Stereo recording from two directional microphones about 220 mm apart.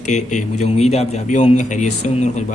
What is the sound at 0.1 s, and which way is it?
A man's voice, 35° left (ahead or behind).